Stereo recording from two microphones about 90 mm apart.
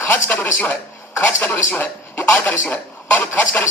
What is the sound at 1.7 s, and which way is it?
Speech, 20° left (ahead or behind).